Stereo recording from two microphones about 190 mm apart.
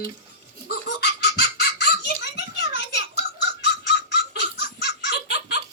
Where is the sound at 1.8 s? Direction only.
60° left (ahead or behind).